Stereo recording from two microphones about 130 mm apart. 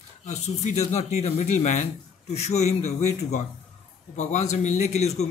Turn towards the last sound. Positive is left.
turn(degrees=55)  # may be behind; listen again after turning